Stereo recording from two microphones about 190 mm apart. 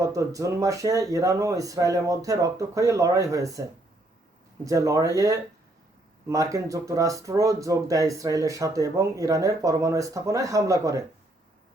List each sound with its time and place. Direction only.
0.0 s speech: 15° right (ahead or behind)